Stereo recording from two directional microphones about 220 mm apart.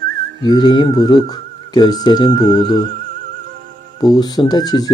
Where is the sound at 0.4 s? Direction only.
20° left (ahead or behind).